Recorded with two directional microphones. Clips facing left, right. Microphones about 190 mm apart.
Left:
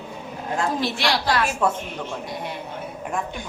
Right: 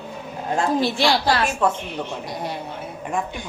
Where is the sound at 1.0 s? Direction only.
30° right (ahead or behind).